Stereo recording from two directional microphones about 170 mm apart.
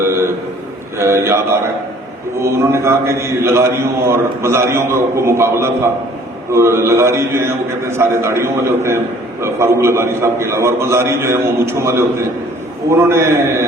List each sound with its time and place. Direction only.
0.9 s a man's voice: 15° right (ahead or behind)